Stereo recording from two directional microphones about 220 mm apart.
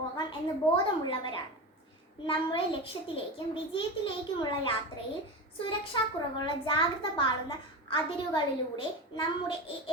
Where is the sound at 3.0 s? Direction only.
25° left (ahead or behind).